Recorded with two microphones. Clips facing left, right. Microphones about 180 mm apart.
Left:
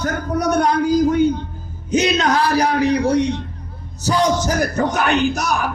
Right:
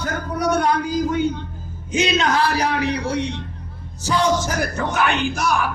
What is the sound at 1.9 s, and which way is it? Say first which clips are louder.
A man's voice: left 3 dB; 40° left (ahead or behind).